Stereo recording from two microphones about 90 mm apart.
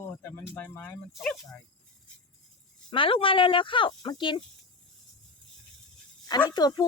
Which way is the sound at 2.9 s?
75° left (ahead or behind).